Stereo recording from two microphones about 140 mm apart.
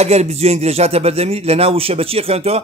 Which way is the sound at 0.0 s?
50° right (ahead or behind).